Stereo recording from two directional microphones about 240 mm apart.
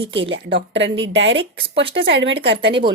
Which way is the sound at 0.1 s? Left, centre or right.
Right.